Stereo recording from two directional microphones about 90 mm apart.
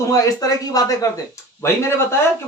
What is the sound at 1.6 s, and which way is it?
Speech, 30° left (ahead or behind).